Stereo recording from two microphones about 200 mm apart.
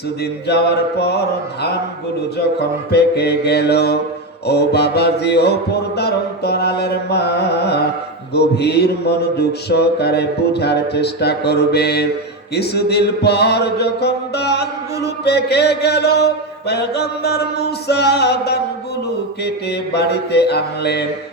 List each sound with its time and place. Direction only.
0.4 s music: 55° left (ahead or behind)
2.6 s music: 55° left (ahead or behind)